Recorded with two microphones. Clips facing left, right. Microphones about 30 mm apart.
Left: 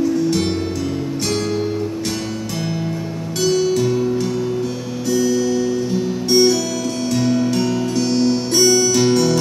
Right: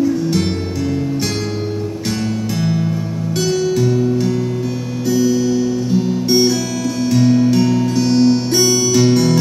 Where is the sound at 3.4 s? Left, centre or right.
Centre.